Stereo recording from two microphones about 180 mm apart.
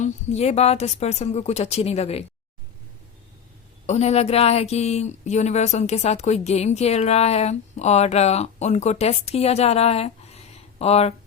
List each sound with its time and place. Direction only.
0.0 s speech: 40° left (ahead or behind)
3.8 s speech: 35° left (ahead or behind)